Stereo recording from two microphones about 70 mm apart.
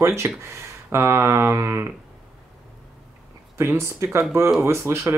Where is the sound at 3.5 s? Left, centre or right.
Right.